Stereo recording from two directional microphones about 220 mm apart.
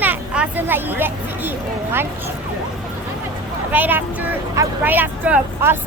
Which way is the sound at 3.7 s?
10° right (ahead or behind).